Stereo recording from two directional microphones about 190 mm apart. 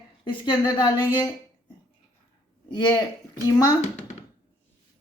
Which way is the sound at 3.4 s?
20° left (ahead or behind).